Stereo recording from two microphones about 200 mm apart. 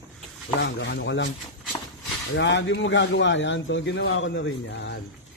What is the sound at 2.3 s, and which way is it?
Speech, 60° left (ahead or behind).